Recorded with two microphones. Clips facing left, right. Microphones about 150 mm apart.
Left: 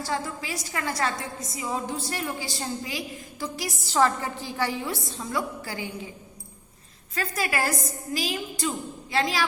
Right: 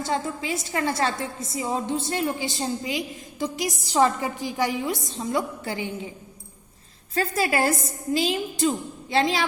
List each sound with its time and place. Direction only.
0.0 s a woman's voice: 25° right (ahead or behind)
7.1 s a woman's voice: 30° right (ahead or behind)